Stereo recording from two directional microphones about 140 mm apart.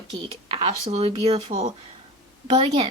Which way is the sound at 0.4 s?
45° right (ahead or behind).